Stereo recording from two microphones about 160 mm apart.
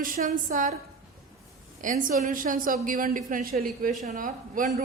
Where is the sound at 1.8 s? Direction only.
55° right (ahead or behind).